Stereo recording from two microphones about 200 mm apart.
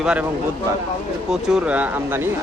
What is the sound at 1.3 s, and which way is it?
Speech, 5° right (ahead or behind).